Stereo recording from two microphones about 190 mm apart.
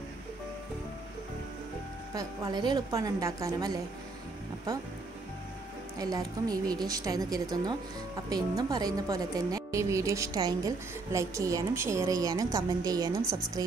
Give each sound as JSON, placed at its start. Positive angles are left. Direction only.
{"t": 2.1, "sound": "a woman's voice", "side_deg": -20}
{"t": 5.9, "sound": "a woman's voice", "side_deg": -20}